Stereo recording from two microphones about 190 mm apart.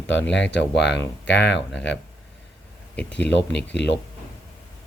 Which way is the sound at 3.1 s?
65° left (ahead or behind).